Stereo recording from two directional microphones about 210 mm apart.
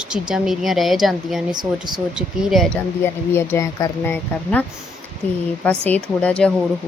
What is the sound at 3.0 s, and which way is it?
Speech, 10° left (ahead or behind).